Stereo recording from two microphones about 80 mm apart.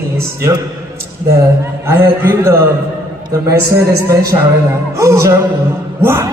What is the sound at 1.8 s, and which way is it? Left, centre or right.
A man's voice, right.